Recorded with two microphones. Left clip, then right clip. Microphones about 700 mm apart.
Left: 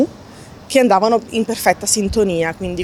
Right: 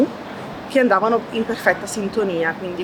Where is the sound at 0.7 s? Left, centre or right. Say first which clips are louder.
Left 3 dB; left.